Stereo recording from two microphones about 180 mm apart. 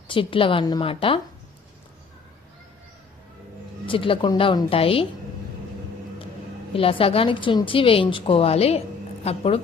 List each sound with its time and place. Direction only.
0.1 s a woman's voice: 30° left (ahead or behind)
3.8 s a woman's voice: 30° left (ahead or behind)
6.7 s a woman's voice: 30° left (ahead or behind)